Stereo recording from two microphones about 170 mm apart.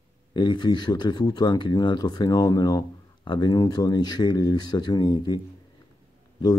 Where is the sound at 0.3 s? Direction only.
25° left (ahead or behind).